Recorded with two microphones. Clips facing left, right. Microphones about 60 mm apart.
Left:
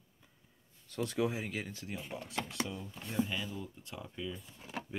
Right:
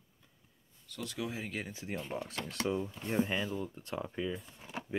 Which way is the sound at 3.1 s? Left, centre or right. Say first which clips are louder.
Right 3 dB; right.